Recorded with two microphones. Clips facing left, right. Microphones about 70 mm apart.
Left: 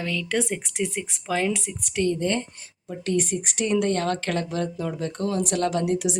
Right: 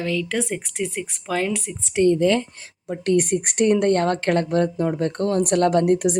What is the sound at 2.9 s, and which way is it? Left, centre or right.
Speech, right.